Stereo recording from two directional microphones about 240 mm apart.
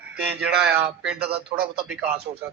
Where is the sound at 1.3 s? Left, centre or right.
Right.